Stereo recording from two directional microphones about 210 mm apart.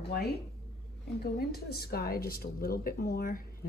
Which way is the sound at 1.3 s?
50° left (ahead or behind).